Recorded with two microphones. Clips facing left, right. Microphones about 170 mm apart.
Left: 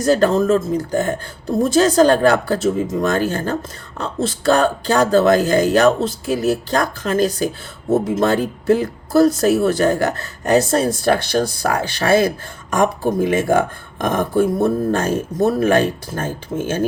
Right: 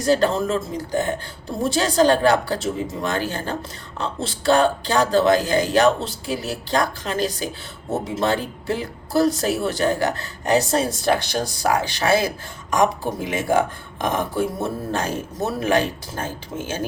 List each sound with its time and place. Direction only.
0.0 s speech: 50° left (ahead or behind)